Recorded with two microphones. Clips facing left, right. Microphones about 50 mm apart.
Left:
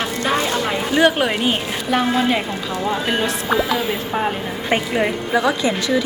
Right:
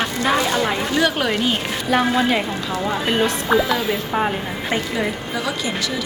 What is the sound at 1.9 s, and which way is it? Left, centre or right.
A woman's voice, centre.